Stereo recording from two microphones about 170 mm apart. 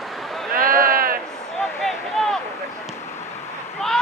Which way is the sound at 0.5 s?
55° right (ahead or behind).